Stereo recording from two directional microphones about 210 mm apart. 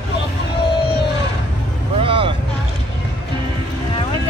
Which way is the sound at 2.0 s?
25° right (ahead or behind).